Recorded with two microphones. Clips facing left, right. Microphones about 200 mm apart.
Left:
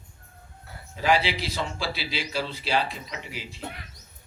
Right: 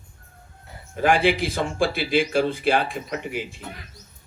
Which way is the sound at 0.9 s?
50° right (ahead or behind).